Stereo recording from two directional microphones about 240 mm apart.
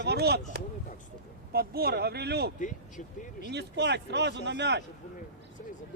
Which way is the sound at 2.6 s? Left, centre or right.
Left.